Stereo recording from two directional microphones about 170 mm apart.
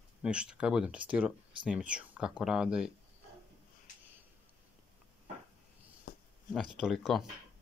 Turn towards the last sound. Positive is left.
turn(degrees=0)  # may be behind; listen again after turning